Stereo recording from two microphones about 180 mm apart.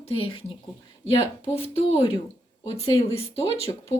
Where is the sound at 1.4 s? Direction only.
35° left (ahead or behind).